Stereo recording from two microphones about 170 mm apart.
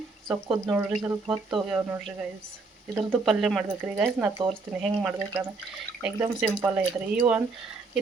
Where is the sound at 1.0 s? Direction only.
20° right (ahead or behind).